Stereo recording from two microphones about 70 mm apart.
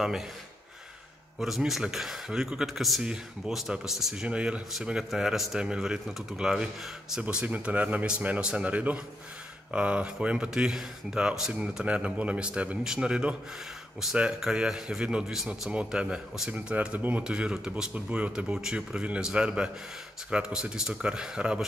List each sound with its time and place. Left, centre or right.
1.4 s speech: centre